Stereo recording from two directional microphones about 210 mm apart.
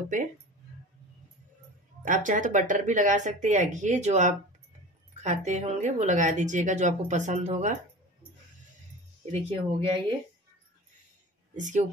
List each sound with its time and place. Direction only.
0.1 s speech: 35° right (ahead or behind)
2.0 s speech: 40° right (ahead or behind)
9.2 s speech: 30° right (ahead or behind)
11.5 s speech: 35° right (ahead or behind)